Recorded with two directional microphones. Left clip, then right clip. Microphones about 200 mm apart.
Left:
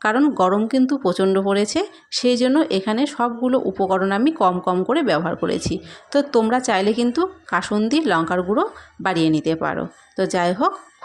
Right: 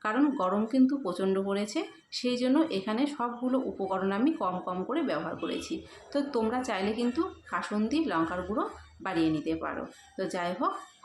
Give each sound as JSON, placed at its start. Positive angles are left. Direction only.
{"t": 0.0, "sound": "speech", "side_deg": 40}